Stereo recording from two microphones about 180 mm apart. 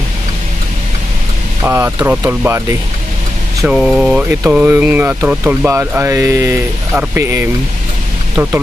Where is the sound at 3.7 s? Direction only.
5° right (ahead or behind).